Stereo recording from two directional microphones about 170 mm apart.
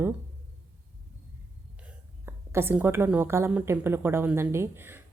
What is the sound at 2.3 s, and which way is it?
Speech, 15° right (ahead or behind).